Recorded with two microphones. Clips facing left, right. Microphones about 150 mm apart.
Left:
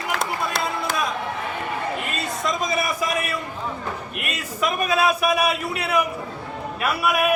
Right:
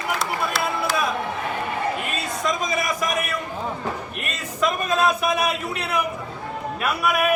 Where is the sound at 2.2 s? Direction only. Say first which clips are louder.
Even; centre (ahead or behind).